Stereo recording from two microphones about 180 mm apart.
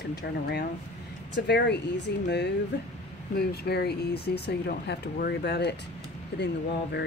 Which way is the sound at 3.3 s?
60° left (ahead or behind).